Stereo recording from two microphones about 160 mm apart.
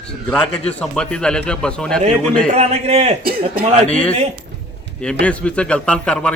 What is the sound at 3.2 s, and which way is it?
Speech, 65° right (ahead or behind).